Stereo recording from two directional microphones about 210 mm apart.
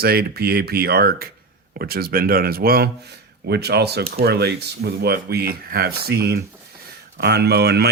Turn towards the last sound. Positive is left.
turn(degrees=-50)  # may be behind; listen again after turning